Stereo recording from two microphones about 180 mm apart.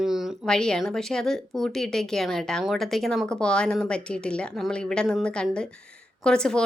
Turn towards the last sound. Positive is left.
turn(degrees=5)  # may be behind; listen again after turning